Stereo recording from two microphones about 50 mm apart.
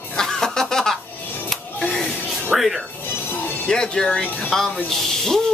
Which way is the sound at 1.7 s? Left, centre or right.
Centre.